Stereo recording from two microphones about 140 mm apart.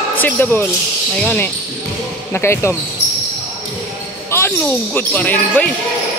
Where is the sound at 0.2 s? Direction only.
15° left (ahead or behind).